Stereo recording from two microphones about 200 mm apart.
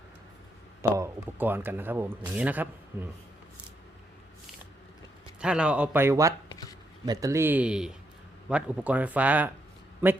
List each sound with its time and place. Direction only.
0.9 s speech: 10° right (ahead or behind)
5.4 s speech: 5° right (ahead or behind)
6.5 s a sound: 20° left (ahead or behind)
7.0 s speech: 20° right (ahead or behind)